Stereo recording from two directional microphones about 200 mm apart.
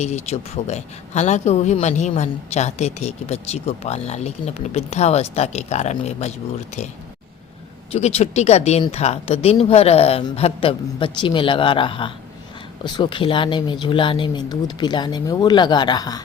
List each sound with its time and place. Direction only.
0.0 s a man's voice: 35° left (ahead or behind)
7.9 s a man's voice: 35° left (ahead or behind)